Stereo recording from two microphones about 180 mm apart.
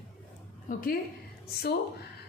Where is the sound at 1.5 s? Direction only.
65° left (ahead or behind).